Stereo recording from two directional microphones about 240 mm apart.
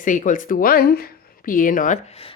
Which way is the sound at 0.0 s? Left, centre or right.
Left.